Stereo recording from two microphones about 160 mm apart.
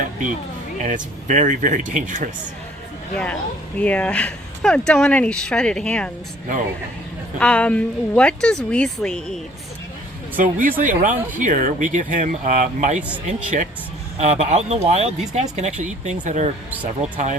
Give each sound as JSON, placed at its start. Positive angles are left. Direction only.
{"t": 0.9, "sound": "speech", "side_deg": -50}
{"t": 3.8, "sound": "speech", "side_deg": 10}
{"t": 7.3, "sound": "a woman's voice", "side_deg": 5}
{"t": 10.3, "sound": "speech", "side_deg": -60}